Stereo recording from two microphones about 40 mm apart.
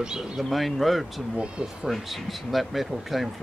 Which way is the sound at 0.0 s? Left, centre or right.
Centre.